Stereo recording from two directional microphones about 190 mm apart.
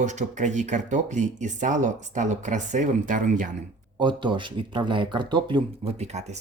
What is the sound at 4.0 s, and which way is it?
Speech, 25° right (ahead or behind).